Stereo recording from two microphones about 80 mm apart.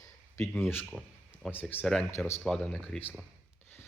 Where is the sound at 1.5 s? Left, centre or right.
Left.